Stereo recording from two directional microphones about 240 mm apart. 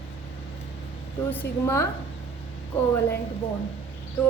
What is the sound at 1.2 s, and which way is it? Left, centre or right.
A woman's voice, centre.